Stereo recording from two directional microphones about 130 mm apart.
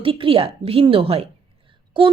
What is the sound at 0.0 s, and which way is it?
A woman's voice, 45° right (ahead or behind).